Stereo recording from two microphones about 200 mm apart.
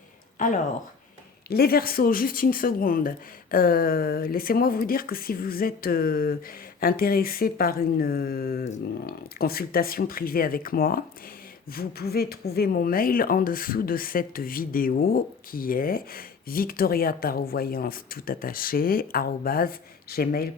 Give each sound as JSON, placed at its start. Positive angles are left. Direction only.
{"t": 0.3, "sound": "speech", "side_deg": 40}